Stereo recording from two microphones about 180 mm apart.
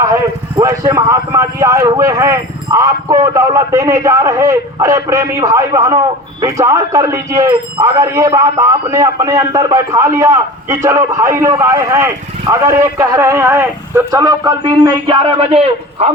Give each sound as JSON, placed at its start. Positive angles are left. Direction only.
{"t": 0.0, "sound": "a man's voice", "side_deg": -15}